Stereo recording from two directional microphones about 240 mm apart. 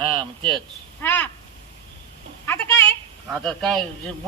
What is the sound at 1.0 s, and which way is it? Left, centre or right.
Speech, centre.